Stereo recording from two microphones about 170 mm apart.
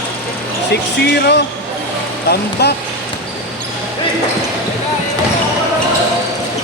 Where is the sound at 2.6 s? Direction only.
75° left (ahead or behind).